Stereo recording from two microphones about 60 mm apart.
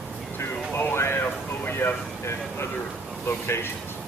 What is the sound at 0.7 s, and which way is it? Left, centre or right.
Speech, left.